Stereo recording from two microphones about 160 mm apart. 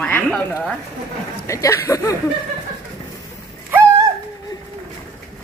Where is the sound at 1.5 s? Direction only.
20° left (ahead or behind).